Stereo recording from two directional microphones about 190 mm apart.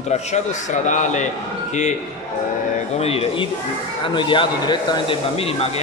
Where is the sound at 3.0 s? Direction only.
30° left (ahead or behind).